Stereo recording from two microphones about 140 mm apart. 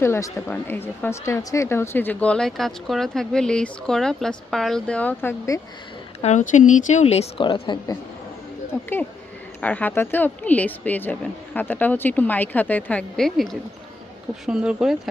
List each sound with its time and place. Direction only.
0.0 s speech: 20° left (ahead or behind)
5.5 s speech: 25° left (ahead or behind)
6.2 s speech: 60° left (ahead or behind)
7.4 s a woman's voice: 35° left (ahead or behind)
9.6 s speech: 10° left (ahead or behind)